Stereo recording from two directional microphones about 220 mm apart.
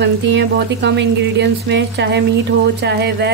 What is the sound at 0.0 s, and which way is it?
Speech, 50° right (ahead or behind).